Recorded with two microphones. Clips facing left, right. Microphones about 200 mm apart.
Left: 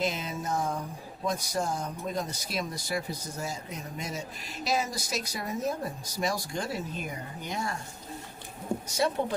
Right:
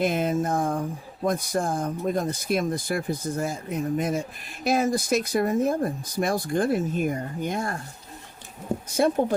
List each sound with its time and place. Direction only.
0.0 s speech: 55° right (ahead or behind)
8.9 s speech: 55° right (ahead or behind)